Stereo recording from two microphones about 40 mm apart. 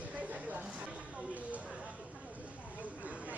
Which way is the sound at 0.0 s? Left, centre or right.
Right.